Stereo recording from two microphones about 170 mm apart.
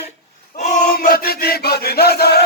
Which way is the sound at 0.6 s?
50° left (ahead or behind).